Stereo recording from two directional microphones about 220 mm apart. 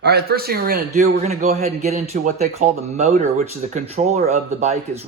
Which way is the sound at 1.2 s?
30° right (ahead or behind).